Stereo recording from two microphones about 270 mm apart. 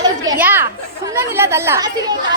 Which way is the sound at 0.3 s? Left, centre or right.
Centre.